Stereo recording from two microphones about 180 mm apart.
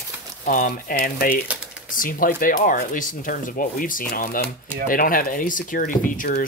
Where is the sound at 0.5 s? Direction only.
50° left (ahead or behind).